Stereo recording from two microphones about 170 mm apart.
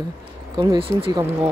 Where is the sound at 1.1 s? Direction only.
15° right (ahead or behind).